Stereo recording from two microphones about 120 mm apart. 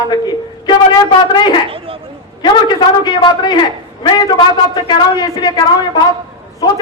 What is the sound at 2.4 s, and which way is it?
A woman's voice, 35° left (ahead or behind).